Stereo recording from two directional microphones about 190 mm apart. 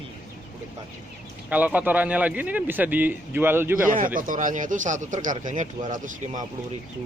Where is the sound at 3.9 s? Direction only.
45° right (ahead or behind).